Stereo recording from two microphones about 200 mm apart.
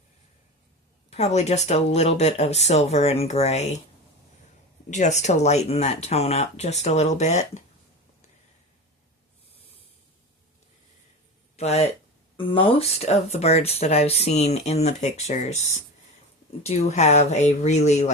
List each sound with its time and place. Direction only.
1.1 s speech: 30° left (ahead or behind)
4.9 s speech: 35° left (ahead or behind)
11.5 s speech: 30° left (ahead or behind)